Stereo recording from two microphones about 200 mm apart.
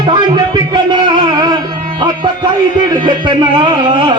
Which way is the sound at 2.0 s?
20° right (ahead or behind).